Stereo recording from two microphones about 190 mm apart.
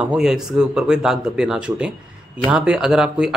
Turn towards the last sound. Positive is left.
turn(degrees=-5)  # may be behind; listen again after turning